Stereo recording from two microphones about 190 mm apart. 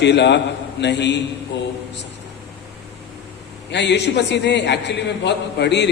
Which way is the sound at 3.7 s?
65° left (ahead or behind).